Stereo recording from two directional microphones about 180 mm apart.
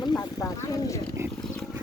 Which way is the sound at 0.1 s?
10° left (ahead or behind).